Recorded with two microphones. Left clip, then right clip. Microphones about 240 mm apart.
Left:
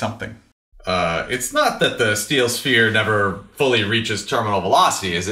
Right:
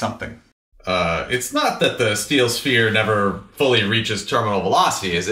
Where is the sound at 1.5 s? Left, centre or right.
Left.